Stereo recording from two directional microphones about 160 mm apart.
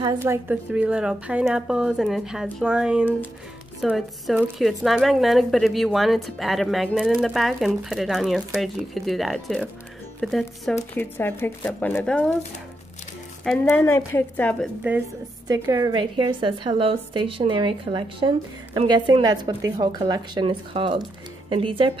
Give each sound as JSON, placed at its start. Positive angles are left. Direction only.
{"t": 0.2, "sound": "a woman's voice", "side_deg": -10}
{"t": 11.0, "sound": "speech", "side_deg": 15}
{"t": 13.7, "sound": "speech", "side_deg": 15}
{"t": 15.4, "sound": "a woman's voice", "side_deg": -20}